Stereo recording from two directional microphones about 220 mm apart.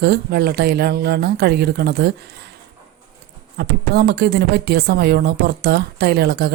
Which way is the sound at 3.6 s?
45° right (ahead or behind).